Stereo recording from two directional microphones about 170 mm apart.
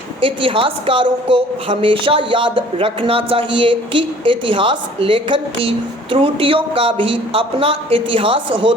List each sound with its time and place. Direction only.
0.2 s a woman's voice: 30° right (ahead or behind)